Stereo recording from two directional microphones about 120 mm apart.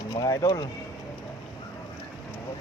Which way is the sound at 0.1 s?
30° left (ahead or behind).